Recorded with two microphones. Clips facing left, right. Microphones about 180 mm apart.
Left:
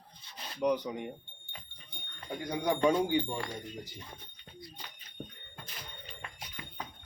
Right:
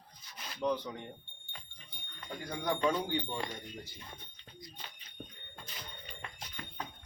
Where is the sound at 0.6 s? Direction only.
15° left (ahead or behind).